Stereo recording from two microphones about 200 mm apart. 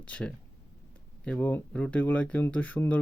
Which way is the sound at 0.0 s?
5° left (ahead or behind).